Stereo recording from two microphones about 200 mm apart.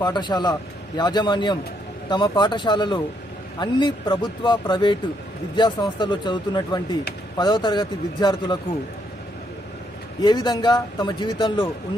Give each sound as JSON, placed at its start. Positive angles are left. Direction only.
{"t": 0.0, "sound": "a man's voice", "side_deg": 20}
{"t": 10.2, "sound": "a man's voice", "side_deg": 20}